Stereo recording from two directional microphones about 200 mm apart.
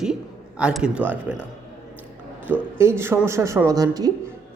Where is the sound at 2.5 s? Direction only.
10° right (ahead or behind).